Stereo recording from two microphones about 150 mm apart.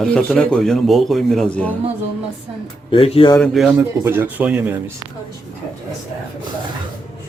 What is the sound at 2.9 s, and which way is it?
Speech, 35° left (ahead or behind).